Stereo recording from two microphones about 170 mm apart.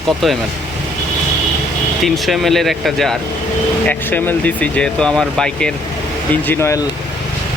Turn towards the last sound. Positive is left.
turn(degrees=15)  # may be behind; listen again after turning